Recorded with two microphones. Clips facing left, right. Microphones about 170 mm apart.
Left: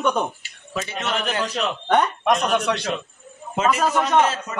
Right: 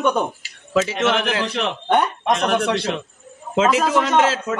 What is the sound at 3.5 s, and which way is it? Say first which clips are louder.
A man's voice: right 3 dB; 90° right.